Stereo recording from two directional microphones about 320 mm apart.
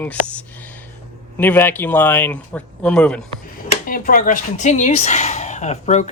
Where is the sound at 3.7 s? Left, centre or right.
Left.